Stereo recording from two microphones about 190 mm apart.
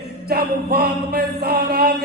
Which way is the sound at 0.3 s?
55° right (ahead or behind).